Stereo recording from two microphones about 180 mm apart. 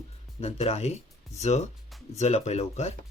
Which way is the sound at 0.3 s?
35° left (ahead or behind).